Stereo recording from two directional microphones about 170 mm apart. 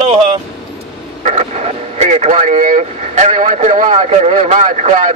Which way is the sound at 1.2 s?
40° right (ahead or behind).